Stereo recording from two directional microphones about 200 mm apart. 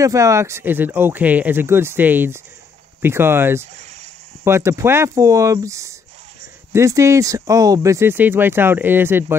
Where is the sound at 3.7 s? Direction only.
35° right (ahead or behind).